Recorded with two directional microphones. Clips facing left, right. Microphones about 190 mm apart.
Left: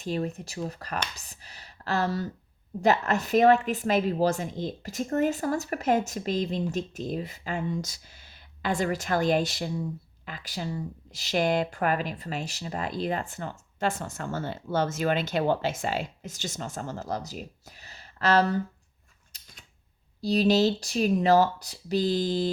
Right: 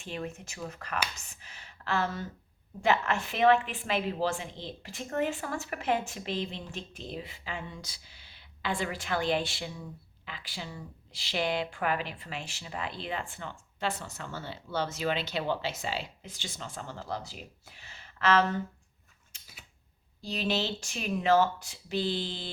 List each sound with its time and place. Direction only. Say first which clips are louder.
0.0 s a woman's voice: left 7 dB; 40° left (ahead or behind)
19.3 s a sound: left 1 dB; 35° left (ahead or behind)
20.2 s a woman's voice: left 10 dB; 40° left (ahead or behind)